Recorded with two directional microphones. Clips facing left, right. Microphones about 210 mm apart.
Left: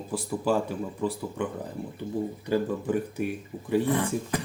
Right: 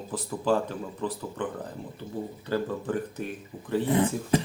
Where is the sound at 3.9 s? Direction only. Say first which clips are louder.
Right 3 dB; 20° right (ahead or behind).